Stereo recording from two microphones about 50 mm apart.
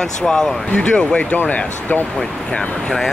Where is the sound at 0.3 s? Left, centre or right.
Centre.